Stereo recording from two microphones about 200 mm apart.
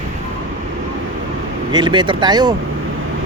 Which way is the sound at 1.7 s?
20° right (ahead or behind).